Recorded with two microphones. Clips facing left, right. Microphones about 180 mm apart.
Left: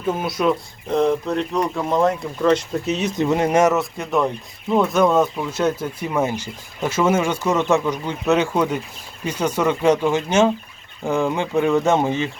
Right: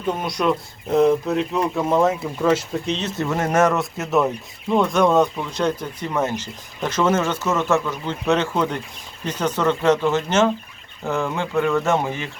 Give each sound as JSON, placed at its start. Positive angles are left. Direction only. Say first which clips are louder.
{"t": 0.2, "sound": "speech", "louder": "left 1 dB", "side_deg": 5}
{"t": 2.8, "sound": "speech", "louder": "left 4 dB", "side_deg": 10}
{"t": 3.8, "sound": "speech", "louder": "even", "side_deg": -5}